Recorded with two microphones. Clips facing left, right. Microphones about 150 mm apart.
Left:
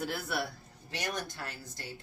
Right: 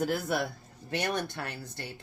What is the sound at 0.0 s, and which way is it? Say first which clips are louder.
Speech: right 7 dB; 45° right (ahead or behind).